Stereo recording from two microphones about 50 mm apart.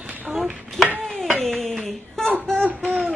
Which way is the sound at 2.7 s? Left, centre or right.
Right.